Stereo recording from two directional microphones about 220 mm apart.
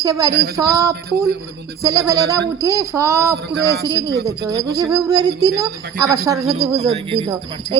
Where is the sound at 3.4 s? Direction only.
50° right (ahead or behind).